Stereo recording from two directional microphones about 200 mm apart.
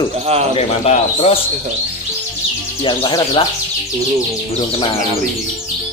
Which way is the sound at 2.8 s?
25° left (ahead or behind).